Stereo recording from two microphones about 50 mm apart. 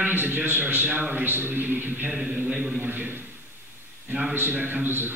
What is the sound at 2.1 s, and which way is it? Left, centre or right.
Speech, centre.